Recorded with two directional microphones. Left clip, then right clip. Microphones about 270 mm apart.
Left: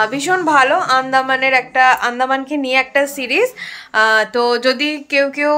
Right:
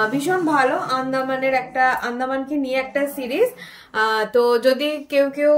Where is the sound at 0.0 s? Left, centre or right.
Centre.